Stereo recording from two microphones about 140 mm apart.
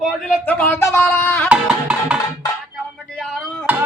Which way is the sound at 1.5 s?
5° right (ahead or behind).